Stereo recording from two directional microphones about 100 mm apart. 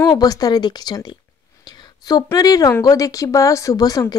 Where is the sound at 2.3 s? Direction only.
40° left (ahead or behind).